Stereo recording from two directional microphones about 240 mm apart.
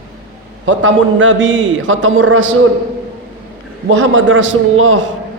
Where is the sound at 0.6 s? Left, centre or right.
Right.